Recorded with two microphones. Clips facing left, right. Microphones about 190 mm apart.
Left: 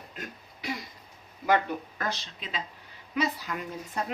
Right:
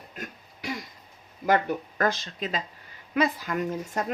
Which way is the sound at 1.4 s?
45° right (ahead or behind).